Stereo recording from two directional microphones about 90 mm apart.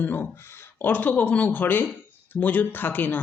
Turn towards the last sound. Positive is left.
turn(degrees=20)  # may be behind; listen again after turning